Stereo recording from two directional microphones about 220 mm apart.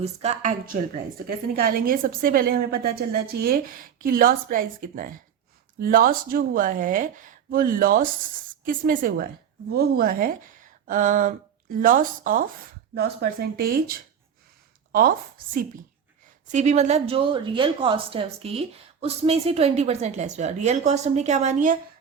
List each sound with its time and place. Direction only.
0.0 s a woman's voice: 30° right (ahead or behind)
16.5 s speech: 30° right (ahead or behind)